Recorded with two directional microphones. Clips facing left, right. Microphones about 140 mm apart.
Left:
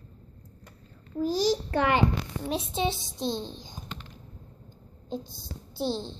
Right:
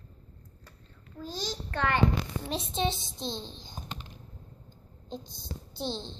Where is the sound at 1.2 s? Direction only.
10° left (ahead or behind).